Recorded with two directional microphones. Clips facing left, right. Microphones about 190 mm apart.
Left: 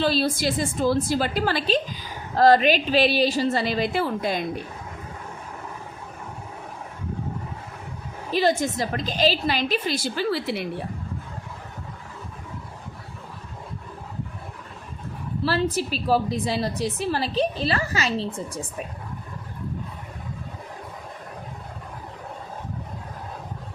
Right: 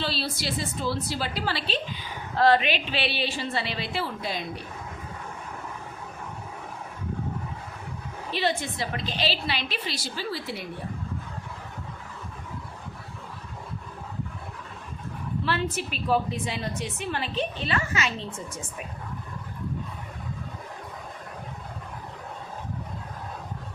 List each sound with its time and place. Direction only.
0.0 s a woman's voice: 45° left (ahead or behind)
8.3 s a woman's voice: 40° left (ahead or behind); by 10.6 s 70° left (ahead or behind)
15.4 s a woman's voice: 35° left (ahead or behind)